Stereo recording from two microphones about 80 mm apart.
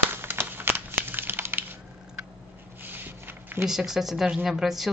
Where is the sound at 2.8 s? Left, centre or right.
Right.